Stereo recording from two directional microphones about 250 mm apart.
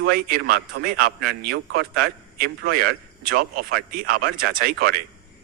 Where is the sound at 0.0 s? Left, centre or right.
Right.